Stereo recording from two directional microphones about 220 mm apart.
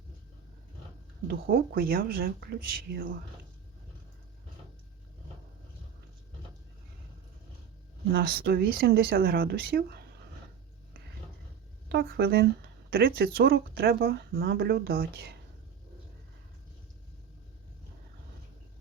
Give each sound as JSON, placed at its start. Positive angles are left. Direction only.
{"t": 1.3, "sound": "speech", "side_deg": -40}
{"t": 8.1, "sound": "speech", "side_deg": -45}
{"t": 11.9, "sound": "speech", "side_deg": -45}